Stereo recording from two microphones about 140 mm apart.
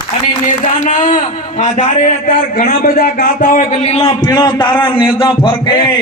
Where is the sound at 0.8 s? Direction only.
60° left (ahead or behind).